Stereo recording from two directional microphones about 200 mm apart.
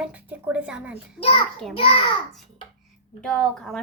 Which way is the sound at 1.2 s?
30° left (ahead or behind).